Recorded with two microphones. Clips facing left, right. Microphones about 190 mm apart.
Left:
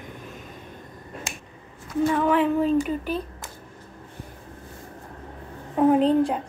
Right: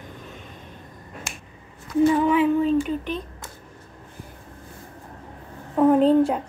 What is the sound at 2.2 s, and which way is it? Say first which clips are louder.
Speech: right 2 dB; 5° right (ahead or behind).